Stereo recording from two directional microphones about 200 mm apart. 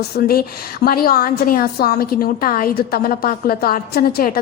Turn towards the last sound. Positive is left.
turn(degrees=50)  # may be behind; listen again after turning